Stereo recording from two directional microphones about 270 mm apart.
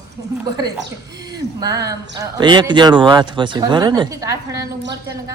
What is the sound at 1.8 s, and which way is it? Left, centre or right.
Speech, centre.